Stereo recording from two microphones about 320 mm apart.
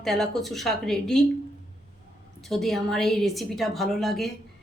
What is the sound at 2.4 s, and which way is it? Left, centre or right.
A woman's voice, centre.